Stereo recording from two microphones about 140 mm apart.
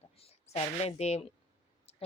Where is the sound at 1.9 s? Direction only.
45° left (ahead or behind).